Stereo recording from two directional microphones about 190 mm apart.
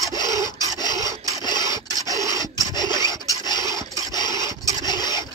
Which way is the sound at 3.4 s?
20° left (ahead or behind).